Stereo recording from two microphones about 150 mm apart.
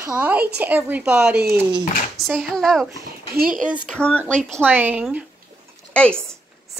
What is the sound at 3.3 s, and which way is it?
Speech, 70° right (ahead or behind).